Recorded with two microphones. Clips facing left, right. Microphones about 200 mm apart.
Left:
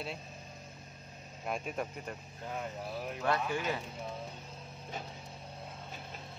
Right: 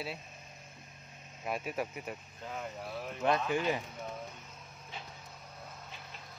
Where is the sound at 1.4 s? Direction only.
5° right (ahead or behind).